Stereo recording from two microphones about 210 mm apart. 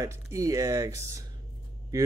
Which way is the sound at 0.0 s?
15° right (ahead or behind).